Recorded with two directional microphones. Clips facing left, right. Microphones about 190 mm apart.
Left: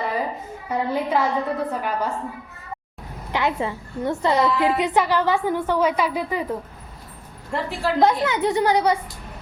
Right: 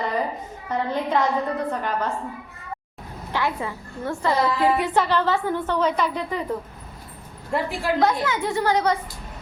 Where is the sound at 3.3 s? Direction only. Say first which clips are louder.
Left 3 dB; 20° left (ahead or behind).